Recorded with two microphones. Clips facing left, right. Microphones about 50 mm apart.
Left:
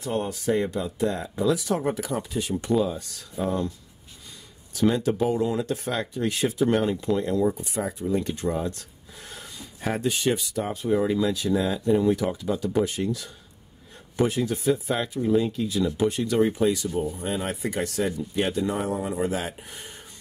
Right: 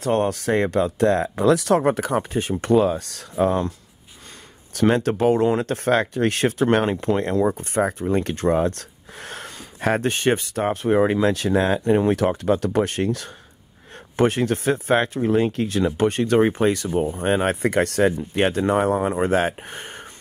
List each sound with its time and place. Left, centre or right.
0.0 s speech: right
2.6 s speech: right
4.7 s speech: right